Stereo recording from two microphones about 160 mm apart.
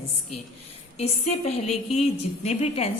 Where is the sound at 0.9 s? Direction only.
40° left (ahead or behind).